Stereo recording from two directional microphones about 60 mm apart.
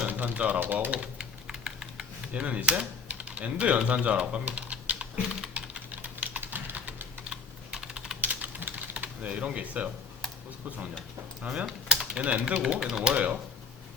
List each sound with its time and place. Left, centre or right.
0.1 s speech: right
0.9 s speech: centre
1.5 s typing: centre
2.3 s speech: right
5.5 s typing: right
7.3 s computer keyboard: centre
8.2 s typing: right
11.6 s typing: centre
12.2 s speech: right